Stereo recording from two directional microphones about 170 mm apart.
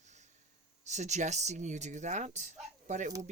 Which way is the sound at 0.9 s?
45° right (ahead or behind).